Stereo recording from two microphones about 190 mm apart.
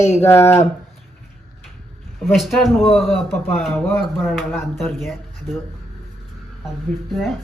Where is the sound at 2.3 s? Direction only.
Centre (ahead or behind).